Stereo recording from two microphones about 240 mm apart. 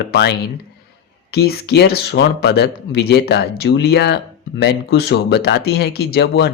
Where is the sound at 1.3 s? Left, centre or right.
Left.